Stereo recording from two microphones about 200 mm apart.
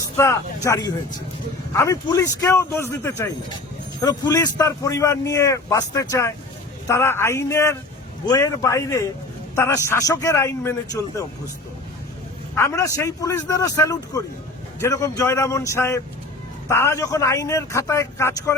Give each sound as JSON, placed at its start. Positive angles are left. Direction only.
{"t": 0.0, "sound": "a man's voice", "side_deg": 15}
{"t": 12.5, "sound": "a man's voice", "side_deg": 15}